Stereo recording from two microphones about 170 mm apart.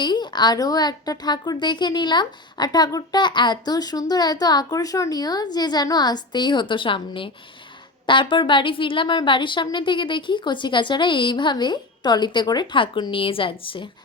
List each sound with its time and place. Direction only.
0.0 s a woman's voice: 25° left (ahead or behind)